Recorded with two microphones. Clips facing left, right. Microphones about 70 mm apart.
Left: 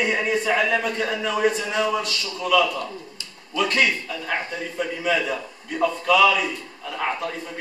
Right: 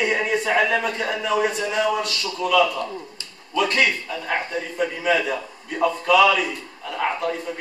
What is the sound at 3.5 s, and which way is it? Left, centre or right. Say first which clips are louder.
A man's voice: right 1 dB; centre.